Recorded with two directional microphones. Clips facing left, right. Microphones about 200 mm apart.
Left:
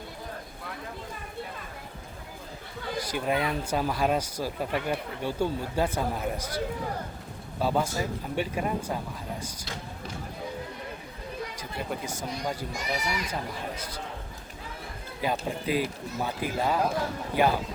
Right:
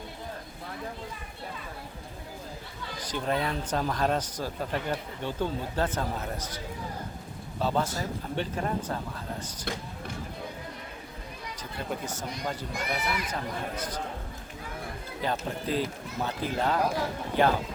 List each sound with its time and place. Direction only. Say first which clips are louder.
3.1 s speech: even; 10° left (ahead or behind)
7.6 s speech: left 2 dB; 10° left (ahead or behind)
11.5 s speech: left 1 dB; 10° left (ahead or behind)
12.7 s speech: even; 55° right (ahead or behind)
15.2 s speech: left 2 dB; 10° left (ahead or behind)